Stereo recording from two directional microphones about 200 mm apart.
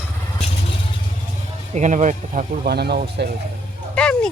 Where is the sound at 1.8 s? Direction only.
35° right (ahead or behind); by 3.3 s 55° right (ahead or behind).